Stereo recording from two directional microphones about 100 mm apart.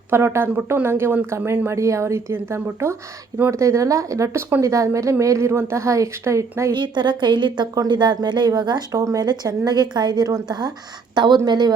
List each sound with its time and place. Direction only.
0.3 s a woman's voice: 25° right (ahead or behind)
6.7 s a woman's voice: 50° right (ahead or behind)